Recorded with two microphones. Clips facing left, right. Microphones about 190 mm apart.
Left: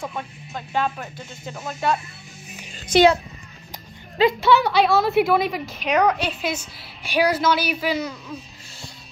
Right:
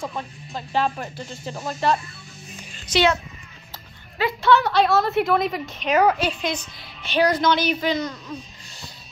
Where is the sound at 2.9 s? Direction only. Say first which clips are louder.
Left 5 dB; 55° left (ahead or behind).